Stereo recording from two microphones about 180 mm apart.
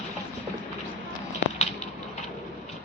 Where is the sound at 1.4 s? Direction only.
70° left (ahead or behind).